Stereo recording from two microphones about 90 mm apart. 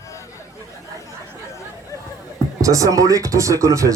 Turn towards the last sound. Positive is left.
turn(degrees=-35)  # may be behind; listen again after turning